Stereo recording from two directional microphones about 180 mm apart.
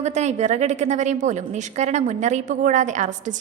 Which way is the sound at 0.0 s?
40° right (ahead or behind).